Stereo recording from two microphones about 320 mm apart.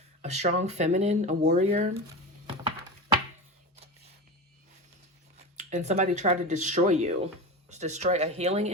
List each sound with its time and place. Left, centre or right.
0.2 s speech: right
5.5 s speech: right